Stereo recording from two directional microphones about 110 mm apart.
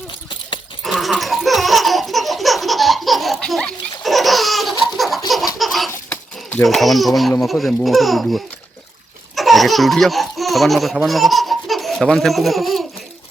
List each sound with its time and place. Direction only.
0.9 s laughter: centre (ahead or behind)
5.5 s baby laughter: centre (ahead or behind)
5.9 s laughter: 20° left (ahead or behind)
6.6 s speech: centre (ahead or behind)